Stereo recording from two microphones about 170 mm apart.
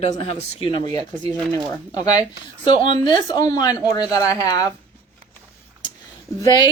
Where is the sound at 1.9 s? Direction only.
20° left (ahead or behind).